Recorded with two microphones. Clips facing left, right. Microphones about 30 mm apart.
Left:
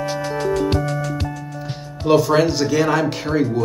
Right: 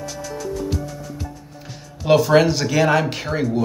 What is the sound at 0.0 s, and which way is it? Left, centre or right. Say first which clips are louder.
Music: left 7 dB; left.